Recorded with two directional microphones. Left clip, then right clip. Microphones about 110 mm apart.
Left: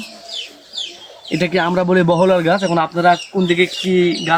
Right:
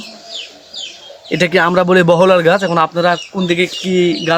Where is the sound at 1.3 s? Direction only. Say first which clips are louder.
Right 5 dB; 90° right; by 2.7 s 60° right (ahead or behind).